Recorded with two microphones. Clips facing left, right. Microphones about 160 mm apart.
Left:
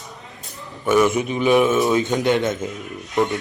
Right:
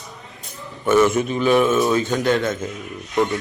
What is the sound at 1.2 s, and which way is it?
A man's voice, 15° left (ahead or behind).